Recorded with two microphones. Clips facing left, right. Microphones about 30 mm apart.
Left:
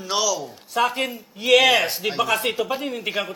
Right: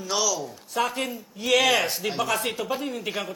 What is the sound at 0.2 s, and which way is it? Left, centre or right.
A man's voice, centre.